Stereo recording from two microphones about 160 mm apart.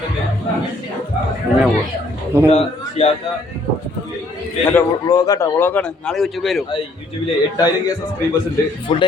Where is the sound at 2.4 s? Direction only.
40° left (ahead or behind).